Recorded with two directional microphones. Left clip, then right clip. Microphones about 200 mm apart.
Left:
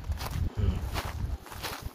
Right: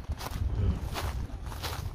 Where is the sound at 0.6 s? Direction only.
10° right (ahead or behind).